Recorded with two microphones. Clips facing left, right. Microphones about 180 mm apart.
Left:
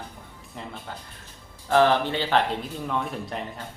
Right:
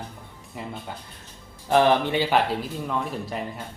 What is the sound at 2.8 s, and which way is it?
Speech, centre (ahead or behind).